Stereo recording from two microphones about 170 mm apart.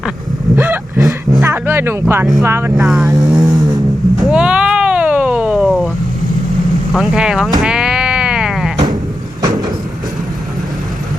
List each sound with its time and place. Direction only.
0.5 s vehicle: 10° right (ahead or behind)
1.5 s a sound: 15° right (ahead or behind)
2.4 s speech: 15° right (ahead or behind)
2.8 s speech: centre (ahead or behind)
3.2 s vehicle: 20° right (ahead or behind)
4.2 s a sound: 5° right (ahead or behind)
6.9 s speech: 5° right (ahead or behind)
7.6 s sheep: 5° right (ahead or behind)